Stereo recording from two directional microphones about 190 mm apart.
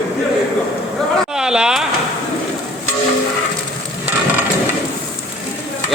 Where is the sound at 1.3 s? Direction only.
5° right (ahead or behind).